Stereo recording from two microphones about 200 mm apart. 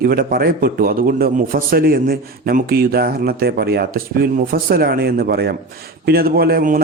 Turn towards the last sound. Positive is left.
turn(degrees=-45)  # may be behind; listen again after turning